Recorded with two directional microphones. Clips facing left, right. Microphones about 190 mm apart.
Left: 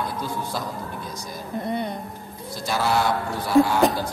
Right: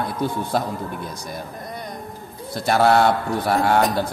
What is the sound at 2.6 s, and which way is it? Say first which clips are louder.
A man's voice: right 6 dB; 60° right (ahead or behind).